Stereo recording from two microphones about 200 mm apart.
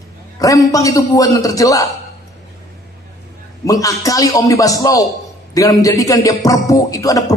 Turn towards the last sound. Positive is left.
turn(degrees=15)  # may be behind; listen again after turning